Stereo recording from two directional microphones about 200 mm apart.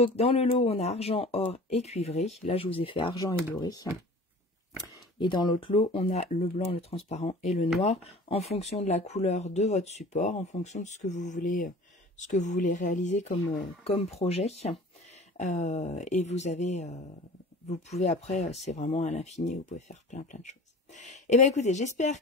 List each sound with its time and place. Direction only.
0.0 s speech: 30° left (ahead or behind)